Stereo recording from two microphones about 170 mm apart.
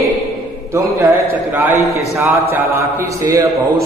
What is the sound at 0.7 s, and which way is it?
A man's voice, 20° right (ahead or behind).